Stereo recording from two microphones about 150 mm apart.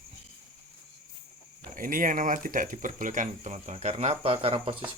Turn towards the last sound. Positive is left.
turn(degrees=-40)  # may be behind; listen again after turning